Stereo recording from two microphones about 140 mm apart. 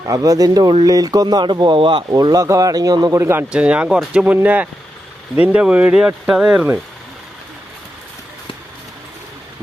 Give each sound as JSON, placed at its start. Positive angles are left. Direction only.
{"t": 0.0, "sound": "speech", "side_deg": -25}
{"t": 3.5, "sound": "speech", "side_deg": -10}